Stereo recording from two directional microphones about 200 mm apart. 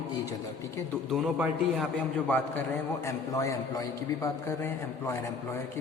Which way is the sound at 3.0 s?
15° left (ahead or behind).